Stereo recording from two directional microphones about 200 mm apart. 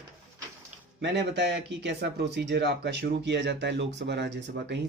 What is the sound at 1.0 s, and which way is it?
Speech, 60° right (ahead or behind).